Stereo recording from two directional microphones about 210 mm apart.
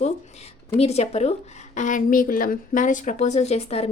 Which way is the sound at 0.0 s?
30° left (ahead or behind).